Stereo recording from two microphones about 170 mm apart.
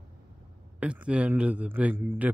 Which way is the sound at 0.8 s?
5° right (ahead or behind).